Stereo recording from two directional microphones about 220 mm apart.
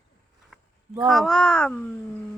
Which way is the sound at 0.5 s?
Centre (ahead or behind).